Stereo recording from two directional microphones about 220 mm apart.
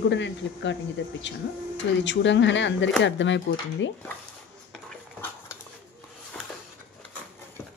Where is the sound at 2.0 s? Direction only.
55° left (ahead or behind).